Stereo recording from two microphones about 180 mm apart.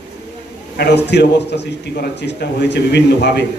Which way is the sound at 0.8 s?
70° left (ahead or behind).